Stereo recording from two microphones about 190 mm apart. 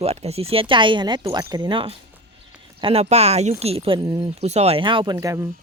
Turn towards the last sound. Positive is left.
turn(degrees=-15)  # may be behind; listen again after turning